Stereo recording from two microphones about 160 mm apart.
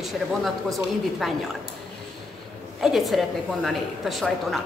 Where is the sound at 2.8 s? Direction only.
Centre (ahead or behind).